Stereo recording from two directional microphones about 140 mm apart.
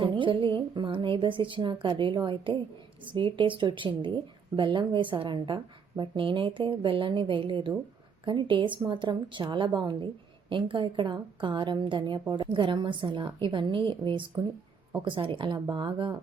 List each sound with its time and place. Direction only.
0.0 s a woman's voice: 35° right (ahead or behind)